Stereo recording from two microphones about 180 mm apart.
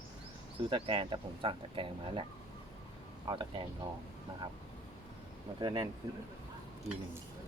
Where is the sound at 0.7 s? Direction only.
30° right (ahead or behind).